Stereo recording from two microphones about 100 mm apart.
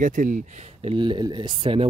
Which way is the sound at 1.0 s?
50° right (ahead or behind).